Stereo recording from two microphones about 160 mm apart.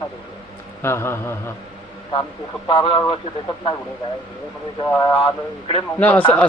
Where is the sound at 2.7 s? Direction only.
25° left (ahead or behind).